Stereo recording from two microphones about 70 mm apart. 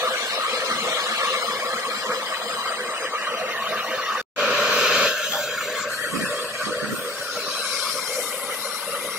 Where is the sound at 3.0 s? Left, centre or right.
Right; by 5.8 s centre.